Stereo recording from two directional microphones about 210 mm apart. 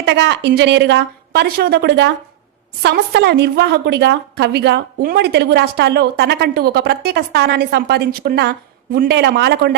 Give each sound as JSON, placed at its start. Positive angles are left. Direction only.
{"t": 0.0, "sound": "a woman's voice", "side_deg": -55}